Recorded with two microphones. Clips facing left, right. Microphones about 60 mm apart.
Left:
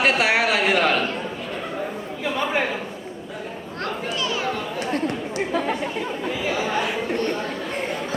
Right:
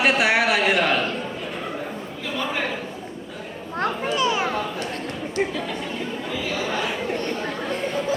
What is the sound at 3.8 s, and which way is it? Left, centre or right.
Children playing, right.